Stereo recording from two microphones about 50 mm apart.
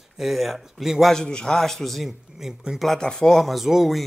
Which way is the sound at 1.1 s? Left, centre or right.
Centre.